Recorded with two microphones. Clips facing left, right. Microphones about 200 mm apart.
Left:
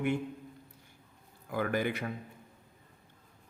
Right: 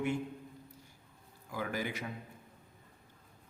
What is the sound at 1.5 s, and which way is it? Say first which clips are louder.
Speech: left 6 dB; 60° left (ahead or behind).